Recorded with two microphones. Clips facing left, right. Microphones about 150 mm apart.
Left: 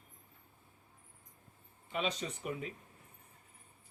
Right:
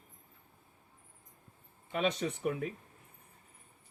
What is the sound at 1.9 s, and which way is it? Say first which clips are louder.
Speech: right 5 dB; 50° right (ahead or behind).